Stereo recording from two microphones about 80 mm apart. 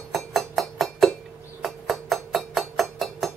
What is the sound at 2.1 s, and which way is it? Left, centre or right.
Music, centre.